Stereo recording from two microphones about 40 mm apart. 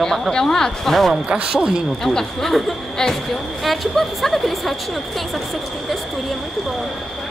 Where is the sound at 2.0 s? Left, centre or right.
Centre.